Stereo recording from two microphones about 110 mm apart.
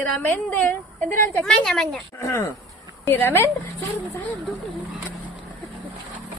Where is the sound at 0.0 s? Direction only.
10° left (ahead or behind).